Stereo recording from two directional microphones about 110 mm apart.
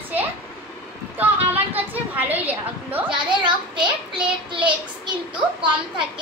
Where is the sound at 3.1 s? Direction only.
45° right (ahead or behind).